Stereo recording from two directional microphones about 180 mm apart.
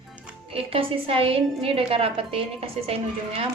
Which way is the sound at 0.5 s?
30° right (ahead or behind).